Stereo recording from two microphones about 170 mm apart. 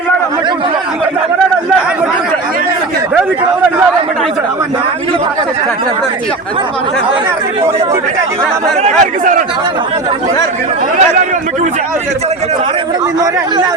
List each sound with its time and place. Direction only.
8.8 s speech: 50° right (ahead or behind)